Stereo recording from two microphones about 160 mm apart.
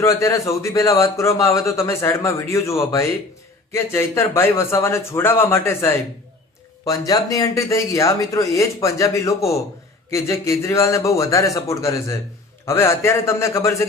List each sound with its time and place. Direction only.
0.0 s a man's voice: 20° left (ahead or behind)